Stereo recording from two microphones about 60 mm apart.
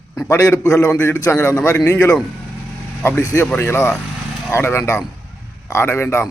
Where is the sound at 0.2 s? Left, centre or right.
Left.